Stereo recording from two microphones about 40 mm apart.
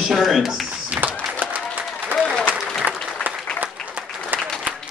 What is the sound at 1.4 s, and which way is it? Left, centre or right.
Applause, right.